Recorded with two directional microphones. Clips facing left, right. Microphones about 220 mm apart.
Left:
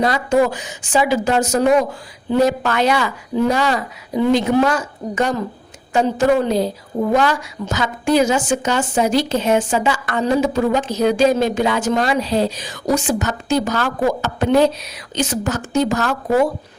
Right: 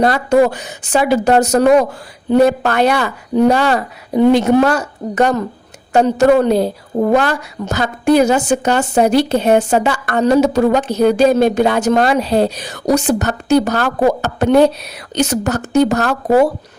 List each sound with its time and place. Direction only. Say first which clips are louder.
0.0 s a woman's voice: right 4 dB; 60° right (ahead or behind); by 10.6 s 75° right (ahead or behind)
10.6 s a woman's voice: right 4 dB; 65° right (ahead or behind)
16.0 s speech: right 4 dB; 40° right (ahead or behind)